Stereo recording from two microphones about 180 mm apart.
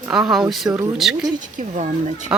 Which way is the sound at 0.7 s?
15° right (ahead or behind).